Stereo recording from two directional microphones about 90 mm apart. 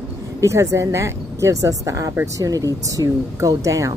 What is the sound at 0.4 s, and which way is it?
Speech, 35° right (ahead or behind).